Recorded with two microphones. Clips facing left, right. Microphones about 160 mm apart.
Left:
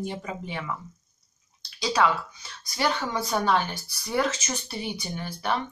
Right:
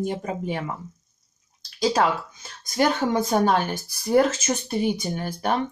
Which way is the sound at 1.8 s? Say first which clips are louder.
Right 3 dB; 45° right (ahead or behind).